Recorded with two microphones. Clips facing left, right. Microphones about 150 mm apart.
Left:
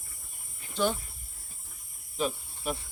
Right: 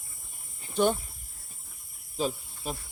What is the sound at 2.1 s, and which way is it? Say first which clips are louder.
Insect: right 1 dB; 30° right (ahead or behind).